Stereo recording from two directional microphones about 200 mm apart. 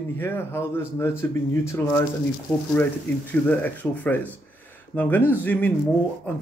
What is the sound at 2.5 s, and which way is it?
A man's voice, 10° left (ahead or behind).